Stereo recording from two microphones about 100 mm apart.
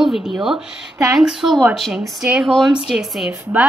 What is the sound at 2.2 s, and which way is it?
A woman's voice, 10° right (ahead or behind).